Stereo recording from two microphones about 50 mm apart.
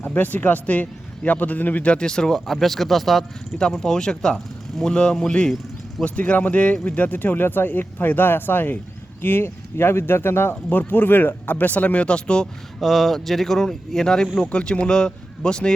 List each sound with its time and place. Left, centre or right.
0.0 s a man's voice: left; by 3.2 s centre
3.6 s speech: centre
6.1 s a man's voice: left
10.5 s speech: left; by 12.5 s centre
12.8 s speech: centre